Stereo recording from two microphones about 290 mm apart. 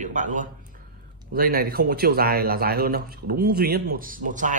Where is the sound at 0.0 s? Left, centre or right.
Right.